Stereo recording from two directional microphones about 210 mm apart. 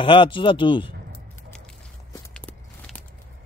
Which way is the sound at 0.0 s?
25° left (ahead or behind).